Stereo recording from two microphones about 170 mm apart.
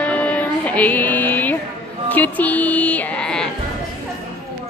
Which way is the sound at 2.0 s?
10° left (ahead or behind).